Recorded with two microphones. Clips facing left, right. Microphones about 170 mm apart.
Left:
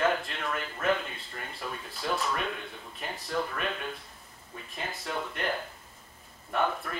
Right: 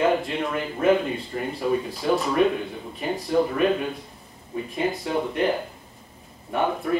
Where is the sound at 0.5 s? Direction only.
5° right (ahead or behind).